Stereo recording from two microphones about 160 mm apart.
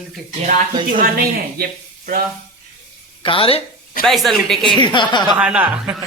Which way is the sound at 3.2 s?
35° left (ahead or behind).